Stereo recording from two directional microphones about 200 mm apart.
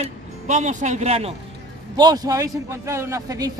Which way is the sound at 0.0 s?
35° right (ahead or behind).